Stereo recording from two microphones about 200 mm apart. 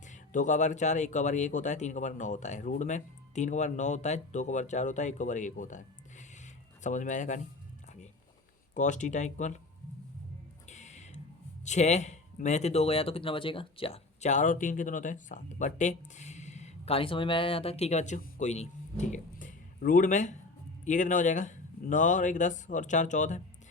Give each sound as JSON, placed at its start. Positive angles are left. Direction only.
{"t": 0.0, "sound": "speech", "side_deg": 40}
{"t": 8.7, "sound": "speech", "side_deg": 40}
{"t": 10.7, "sound": "music", "side_deg": 35}
{"t": 11.6, "sound": "speech", "side_deg": 35}